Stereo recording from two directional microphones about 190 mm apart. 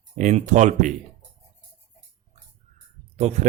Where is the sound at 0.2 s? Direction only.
40° right (ahead or behind).